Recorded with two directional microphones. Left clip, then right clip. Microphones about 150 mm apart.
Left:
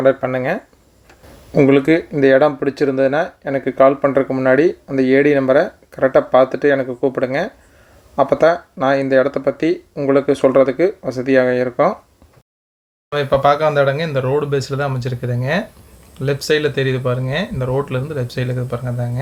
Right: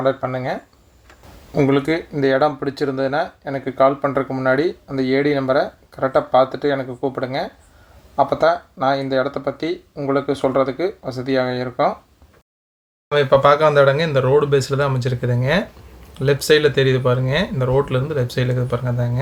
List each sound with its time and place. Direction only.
0.1 s speech: 25° left (ahead or behind)
13.1 s speech: 10° left (ahead or behind)